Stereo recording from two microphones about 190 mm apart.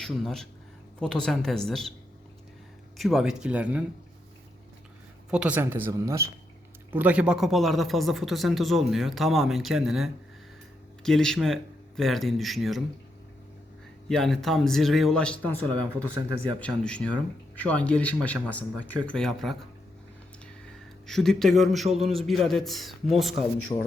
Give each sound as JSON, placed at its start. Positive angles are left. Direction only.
{"t": 0.0, "sound": "speech", "side_deg": 0}
{"t": 3.0, "sound": "speech", "side_deg": 0}
{"t": 5.3, "sound": "speech", "side_deg": -5}
{"t": 14.1, "sound": "speech", "side_deg": 0}
{"t": 21.1, "sound": "speech", "side_deg": 0}
{"t": 23.7, "sound": "speech", "side_deg": 25}